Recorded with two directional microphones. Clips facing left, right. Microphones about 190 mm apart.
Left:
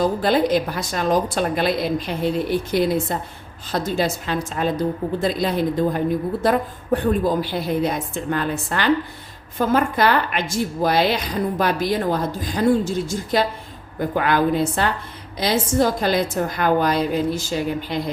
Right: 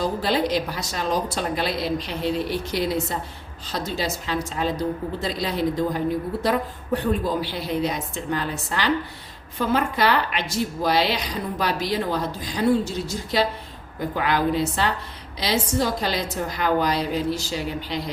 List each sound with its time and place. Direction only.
0.2 s a woman's voice: 50° left (ahead or behind)